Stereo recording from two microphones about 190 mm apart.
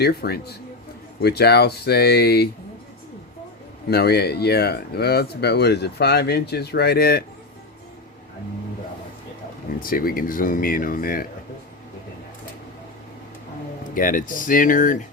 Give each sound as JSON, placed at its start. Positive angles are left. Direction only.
{"t": 0.0, "sound": "speech", "side_deg": 55}
{"t": 3.8, "sound": "speech", "side_deg": 60}
{"t": 9.8, "sound": "speech", "side_deg": 50}
{"t": 13.9, "sound": "speech", "side_deg": 45}